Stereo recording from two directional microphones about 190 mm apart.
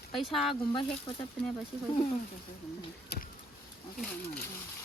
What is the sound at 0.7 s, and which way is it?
Speech, 25° left (ahead or behind).